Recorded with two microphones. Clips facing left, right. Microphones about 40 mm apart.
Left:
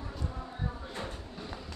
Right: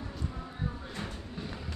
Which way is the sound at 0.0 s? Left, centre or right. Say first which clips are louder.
Even; centre.